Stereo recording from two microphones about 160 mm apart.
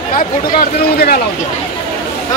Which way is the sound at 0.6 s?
80° left.